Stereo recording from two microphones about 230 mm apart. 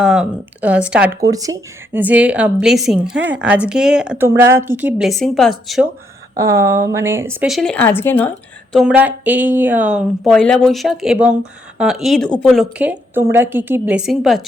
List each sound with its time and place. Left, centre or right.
0.0 s speech: centre
6.3 s speech: centre
8.7 s speech: centre